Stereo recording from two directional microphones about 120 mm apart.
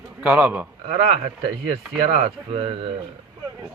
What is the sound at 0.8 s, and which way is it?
Speech, 65° right (ahead or behind).